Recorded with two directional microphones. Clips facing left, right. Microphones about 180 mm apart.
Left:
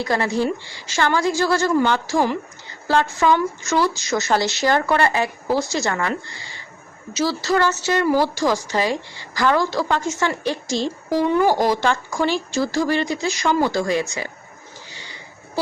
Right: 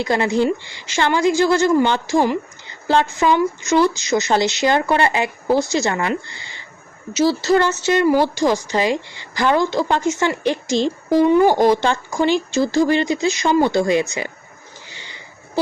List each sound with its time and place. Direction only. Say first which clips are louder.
0.0 s speech: right 3 dB; 20° right (ahead or behind)
7.2 s speech: right 4 dB; 25° right (ahead or behind)